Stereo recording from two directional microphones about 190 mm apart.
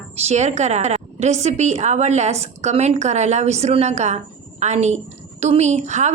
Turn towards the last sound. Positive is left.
turn(degrees=-40)  # may be behind; listen again after turning